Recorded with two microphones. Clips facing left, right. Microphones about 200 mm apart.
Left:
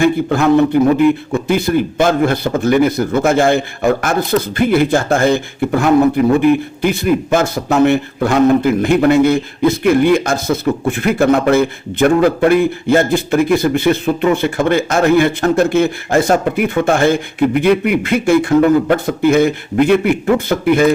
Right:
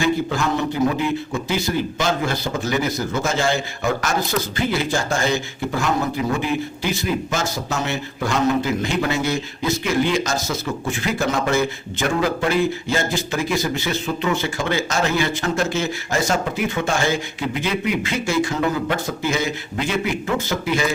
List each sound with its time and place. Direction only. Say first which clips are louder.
0.0 s speech: left 8 dB; 55° left (ahead or behind)